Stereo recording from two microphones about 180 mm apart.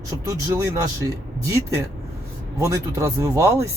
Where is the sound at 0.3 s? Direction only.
20° right (ahead or behind).